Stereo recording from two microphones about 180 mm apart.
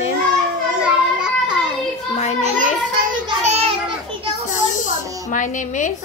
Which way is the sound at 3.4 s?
35° right (ahead or behind).